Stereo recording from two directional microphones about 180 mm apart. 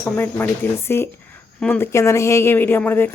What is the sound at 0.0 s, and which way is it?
A woman's voice, 10° left (ahead or behind).